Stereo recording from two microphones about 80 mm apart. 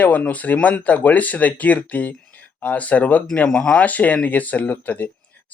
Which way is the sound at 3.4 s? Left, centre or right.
Centre.